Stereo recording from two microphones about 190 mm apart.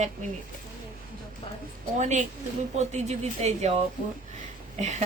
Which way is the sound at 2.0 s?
40° right (ahead or behind).